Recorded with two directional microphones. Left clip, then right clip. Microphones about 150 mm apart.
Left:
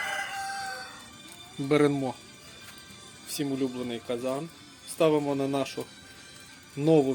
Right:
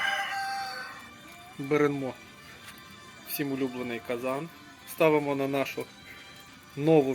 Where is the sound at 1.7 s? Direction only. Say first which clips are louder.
Left 2 dB; 55° left (ahead or behind).